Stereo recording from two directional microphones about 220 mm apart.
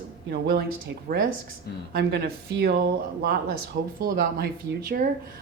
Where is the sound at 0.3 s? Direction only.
50° right (ahead or behind).